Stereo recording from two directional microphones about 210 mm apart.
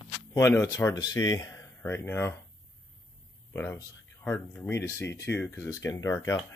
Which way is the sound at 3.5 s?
10° left (ahead or behind).